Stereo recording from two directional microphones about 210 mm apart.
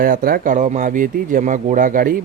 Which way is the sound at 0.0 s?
40° right (ahead or behind).